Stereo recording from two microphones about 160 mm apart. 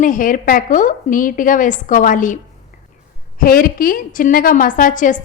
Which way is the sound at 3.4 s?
60° left (ahead or behind).